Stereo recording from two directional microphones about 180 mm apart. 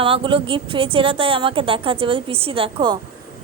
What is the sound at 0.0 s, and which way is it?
A woman's voice, 30° right (ahead or behind).